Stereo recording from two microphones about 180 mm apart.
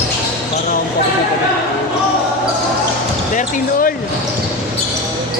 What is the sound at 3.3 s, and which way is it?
Speech, 45° left (ahead or behind).